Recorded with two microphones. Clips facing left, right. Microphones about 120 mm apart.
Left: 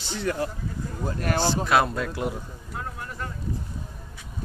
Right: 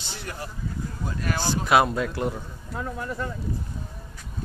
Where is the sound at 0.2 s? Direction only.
90° left.